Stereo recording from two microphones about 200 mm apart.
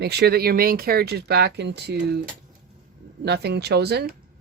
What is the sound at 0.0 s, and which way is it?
Speech, 55° right (ahead or behind).